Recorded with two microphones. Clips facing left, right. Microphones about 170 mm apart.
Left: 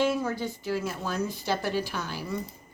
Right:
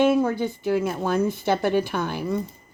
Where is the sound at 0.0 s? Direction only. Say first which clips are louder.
Right 7 dB; 55° right (ahead or behind).